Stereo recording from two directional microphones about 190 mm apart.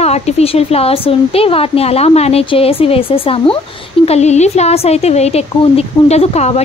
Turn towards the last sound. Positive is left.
turn(degrees=35)  # may be behind; listen again after turning